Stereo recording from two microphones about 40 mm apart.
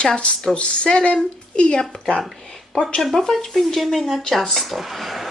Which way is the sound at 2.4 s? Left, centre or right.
Centre.